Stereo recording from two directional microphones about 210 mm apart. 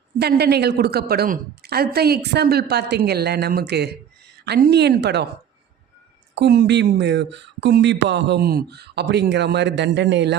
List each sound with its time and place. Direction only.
0.2 s a woman's voice: 50° right (ahead or behind)
6.3 s speech: 50° right (ahead or behind)